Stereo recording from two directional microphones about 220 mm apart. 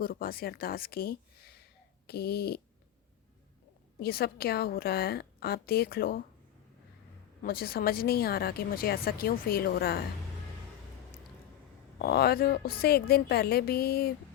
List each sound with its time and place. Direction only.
0.0 s a woman's voice: 40° left (ahead or behind)
4.0 s a woman's voice: 45° left (ahead or behind)
7.4 s a woman's voice: 45° left (ahead or behind)
11.9 s a woman's voice: 45° left (ahead or behind)